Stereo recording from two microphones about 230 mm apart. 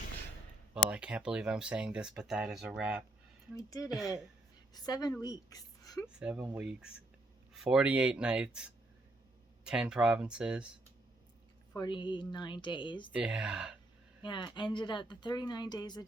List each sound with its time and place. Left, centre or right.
0.7 s speech: centre
3.5 s speech: centre
3.8 s speech: centre
4.7 s a woman's voice: centre
6.1 s speech: centre
11.7 s speech: centre
13.1 s speech: centre
14.2 s speech: left